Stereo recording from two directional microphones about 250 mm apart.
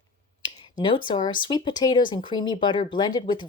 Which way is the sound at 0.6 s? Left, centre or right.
Centre.